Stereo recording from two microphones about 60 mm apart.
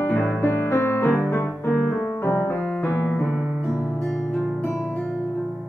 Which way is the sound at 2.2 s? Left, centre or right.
Left.